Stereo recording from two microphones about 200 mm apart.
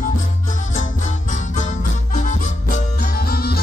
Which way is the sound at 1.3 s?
40° left (ahead or behind).